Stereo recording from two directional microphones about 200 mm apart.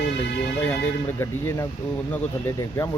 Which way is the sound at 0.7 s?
15° left (ahead or behind).